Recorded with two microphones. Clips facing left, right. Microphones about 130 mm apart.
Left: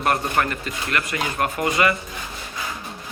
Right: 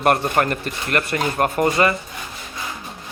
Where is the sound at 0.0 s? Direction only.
50° right (ahead or behind).